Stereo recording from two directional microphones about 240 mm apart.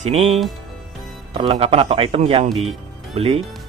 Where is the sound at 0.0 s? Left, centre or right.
Right.